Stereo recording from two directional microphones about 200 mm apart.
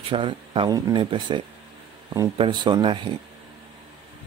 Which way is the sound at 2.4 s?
20° right (ahead or behind).